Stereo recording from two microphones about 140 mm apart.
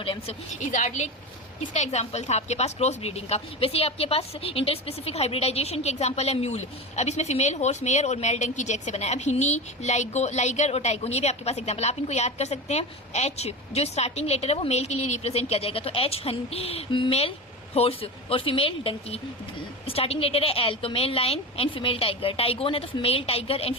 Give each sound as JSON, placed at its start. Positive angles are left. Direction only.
{"t": 0.0, "sound": "speech", "side_deg": 40}
{"t": 0.7, "sound": "a woman's voice", "side_deg": 60}